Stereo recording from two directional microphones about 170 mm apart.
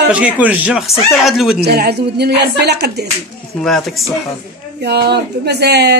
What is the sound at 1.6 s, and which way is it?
A woman's voice, 70° right (ahead or behind).